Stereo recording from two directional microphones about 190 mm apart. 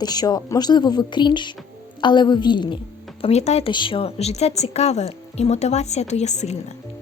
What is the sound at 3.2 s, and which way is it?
A woman's voice, 35° left (ahead or behind).